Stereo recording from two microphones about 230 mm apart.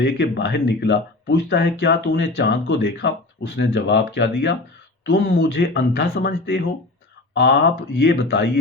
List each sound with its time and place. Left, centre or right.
0.0 s speech: left